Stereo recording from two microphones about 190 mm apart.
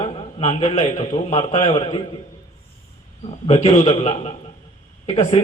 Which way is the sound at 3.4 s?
30° left (ahead or behind).